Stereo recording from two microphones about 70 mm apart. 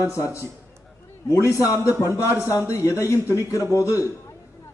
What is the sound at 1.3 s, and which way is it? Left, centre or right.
A man's voice, left.